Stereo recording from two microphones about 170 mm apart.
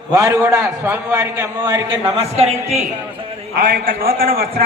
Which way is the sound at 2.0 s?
35° right (ahead or behind).